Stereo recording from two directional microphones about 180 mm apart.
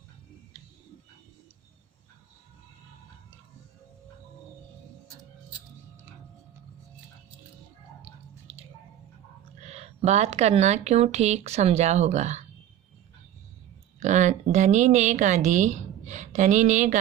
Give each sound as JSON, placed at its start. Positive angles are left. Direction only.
{"t": 8.0, "sound": "drip", "side_deg": -35}
{"t": 9.6, "sound": "speech", "side_deg": -35}
{"t": 14.0, "sound": "speech", "side_deg": -40}